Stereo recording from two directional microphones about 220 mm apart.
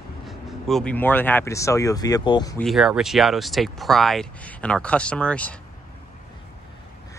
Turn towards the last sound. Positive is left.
turn(degrees=5)  # may be behind; listen again after turning